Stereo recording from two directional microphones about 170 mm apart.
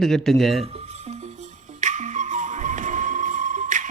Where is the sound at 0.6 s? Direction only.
35° right (ahead or behind).